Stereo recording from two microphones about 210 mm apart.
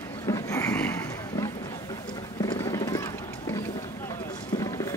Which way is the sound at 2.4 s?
15° left (ahead or behind).